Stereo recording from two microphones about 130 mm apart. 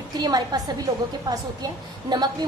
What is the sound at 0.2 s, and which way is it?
A woman's voice, 30° right (ahead or behind).